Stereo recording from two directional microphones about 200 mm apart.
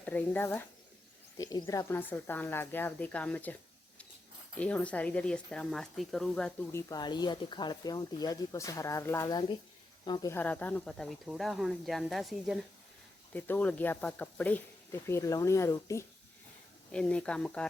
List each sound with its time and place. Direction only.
0.0 s speech: 10° left (ahead or behind)